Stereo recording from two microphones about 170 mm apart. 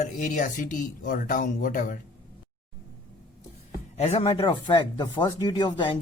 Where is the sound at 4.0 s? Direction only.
35° left (ahead or behind).